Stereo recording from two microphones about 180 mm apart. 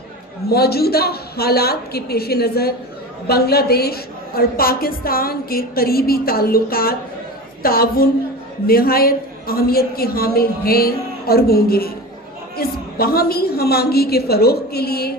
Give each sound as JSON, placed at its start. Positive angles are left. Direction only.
{"t": 0.4, "sound": "a woman's voice", "side_deg": 60}